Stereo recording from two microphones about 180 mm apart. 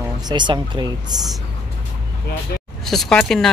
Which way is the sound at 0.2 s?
25° right (ahead or behind).